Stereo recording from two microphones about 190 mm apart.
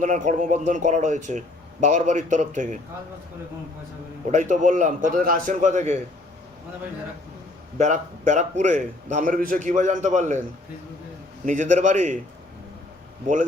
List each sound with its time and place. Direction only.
0.0 s a man's voice: 40° right (ahead or behind)
4.3 s a man's voice: 40° right (ahead or behind)
7.8 s a man's voice: 40° right (ahead or behind)
11.4 s a man's voice: 40° right (ahead or behind)